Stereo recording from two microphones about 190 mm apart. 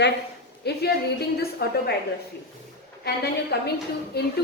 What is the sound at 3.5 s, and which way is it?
Speech, 60° left (ahead or behind).